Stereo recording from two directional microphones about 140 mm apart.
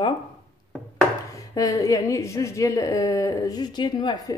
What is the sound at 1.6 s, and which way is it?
A woman's voice, 25° left (ahead or behind).